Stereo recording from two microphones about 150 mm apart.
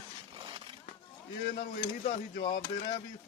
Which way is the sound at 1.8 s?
90° left.